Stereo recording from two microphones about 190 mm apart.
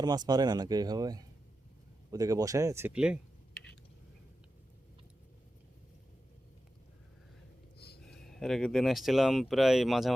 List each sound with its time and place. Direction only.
0.0 s speech: 20° right (ahead or behind); by 3.6 s 5° right (ahead or behind)
7.8 s a sound: 55° left (ahead or behind)
8.0 s speech: centre (ahead or behind)